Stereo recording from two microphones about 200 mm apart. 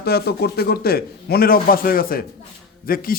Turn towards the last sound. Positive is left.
turn(degrees=45)  # may be behind; listen again after turning